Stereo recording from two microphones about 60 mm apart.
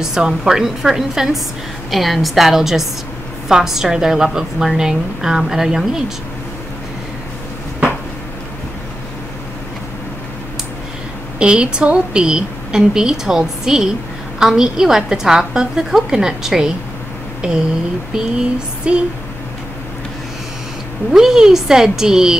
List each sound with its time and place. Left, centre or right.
0.0 s a woman's voice: centre
11.3 s a woman's voice: centre
17.4 s a sound: centre
18.9 s a woman's voice: centre
21.1 s a woman's voice: centre